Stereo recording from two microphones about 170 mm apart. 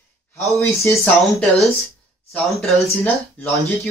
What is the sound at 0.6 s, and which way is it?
Speech, 15° left (ahead or behind).